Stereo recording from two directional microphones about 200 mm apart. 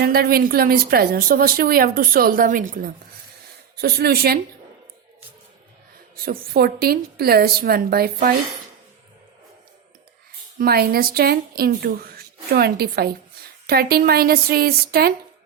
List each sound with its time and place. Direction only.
0.0 s a woman's voice: 50° right (ahead or behind)
6.2 s a woman's voice: 50° right (ahead or behind)
10.6 s a woman's voice: 50° right (ahead or behind)